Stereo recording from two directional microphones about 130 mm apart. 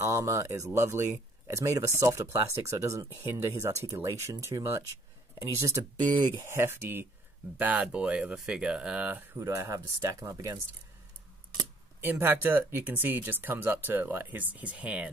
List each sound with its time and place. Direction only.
0.0 s speech: 20° right (ahead or behind)
5.9 s speech: 35° right (ahead or behind)
6.4 s speech: 20° right (ahead or behind)
9.4 s speech: 25° right (ahead or behind)
12.0 s speech: 15° right (ahead or behind)